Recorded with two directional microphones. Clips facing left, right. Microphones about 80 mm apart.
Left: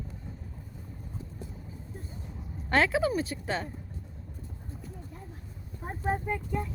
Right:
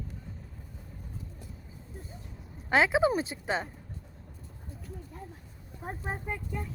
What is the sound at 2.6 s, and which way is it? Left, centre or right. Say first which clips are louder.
Speech: right 1 dB; centre.